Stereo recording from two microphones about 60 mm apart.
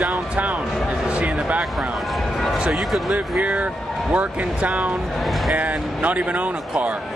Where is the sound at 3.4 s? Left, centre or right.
Right.